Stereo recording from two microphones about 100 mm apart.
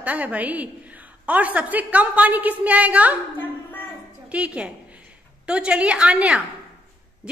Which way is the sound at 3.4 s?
20° left (ahead or behind).